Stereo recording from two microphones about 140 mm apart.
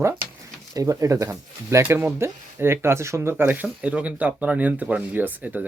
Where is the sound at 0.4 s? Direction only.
25° right (ahead or behind).